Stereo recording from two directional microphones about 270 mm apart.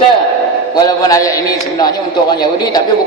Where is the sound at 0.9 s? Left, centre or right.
Centre.